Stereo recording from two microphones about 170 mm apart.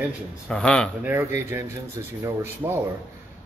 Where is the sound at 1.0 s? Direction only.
10° right (ahead or behind).